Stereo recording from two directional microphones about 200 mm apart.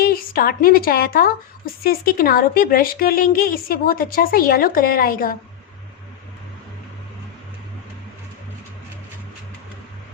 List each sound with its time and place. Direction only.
0.0 s a woman's voice: 50° left (ahead or behind)